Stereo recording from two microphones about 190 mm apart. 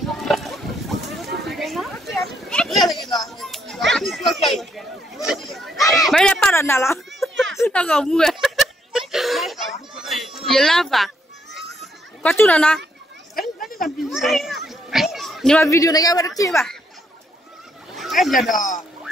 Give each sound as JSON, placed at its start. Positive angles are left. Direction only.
{"t": 0.0, "sound": "boat", "side_deg": 0}
{"t": 1.4, "sound": "a sound", "side_deg": 0}
{"t": 3.2, "sound": "children playing", "side_deg": 0}
{"t": 3.9, "sound": "a sound", "side_deg": 0}
{"t": 7.2, "sound": "a sound", "side_deg": 0}
{"t": 7.5, "sound": "snicker", "side_deg": 10}
{"t": 12.2, "sound": "speech", "side_deg": 5}
{"t": 13.8, "sound": "a child's voice", "side_deg": 0}
{"t": 14.7, "sound": "children playing", "side_deg": 0}
{"t": 15.6, "sound": "speech", "side_deg": 15}
{"t": 17.9, "sound": "speech", "side_deg": 0}
{"t": 18.5, "sound": "a man's voice", "side_deg": 45}